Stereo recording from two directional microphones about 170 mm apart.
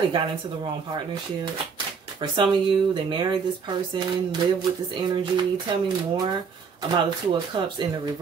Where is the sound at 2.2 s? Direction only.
25° right (ahead or behind).